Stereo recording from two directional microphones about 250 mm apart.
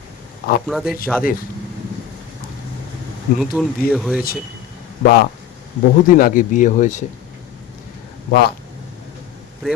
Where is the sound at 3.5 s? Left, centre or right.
Centre.